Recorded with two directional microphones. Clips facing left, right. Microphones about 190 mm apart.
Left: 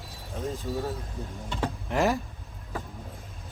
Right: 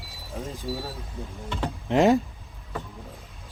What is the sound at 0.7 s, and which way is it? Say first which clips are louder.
Speech: right 1 dB; 10° right (ahead or behind).